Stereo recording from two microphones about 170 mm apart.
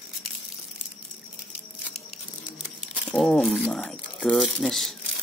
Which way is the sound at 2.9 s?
5° left (ahead or behind).